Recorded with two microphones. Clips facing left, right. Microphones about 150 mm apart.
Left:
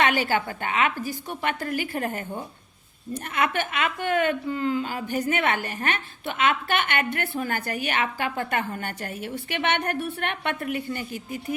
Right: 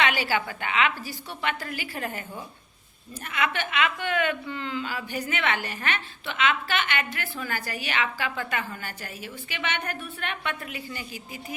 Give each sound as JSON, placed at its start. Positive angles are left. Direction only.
{"t": 0.0, "sound": "a woman's voice", "side_deg": 50}